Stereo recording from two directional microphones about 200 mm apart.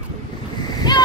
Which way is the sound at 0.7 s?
20° left (ahead or behind).